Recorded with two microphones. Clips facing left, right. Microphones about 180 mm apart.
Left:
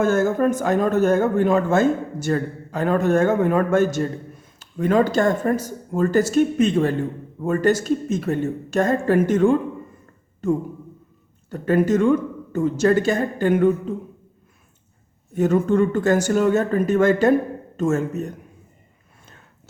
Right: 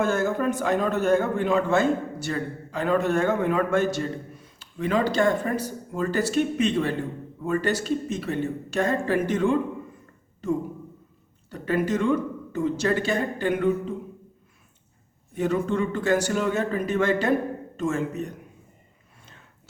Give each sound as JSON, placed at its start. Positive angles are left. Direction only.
{"t": 0.0, "sound": "a man's voice", "side_deg": 45}
{"t": 11.5, "sound": "a man's voice", "side_deg": 45}
{"t": 15.4, "sound": "a man's voice", "side_deg": 45}